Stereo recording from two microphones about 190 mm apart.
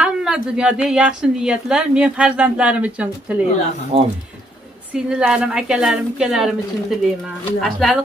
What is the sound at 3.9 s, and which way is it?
Speech, 30° right (ahead or behind).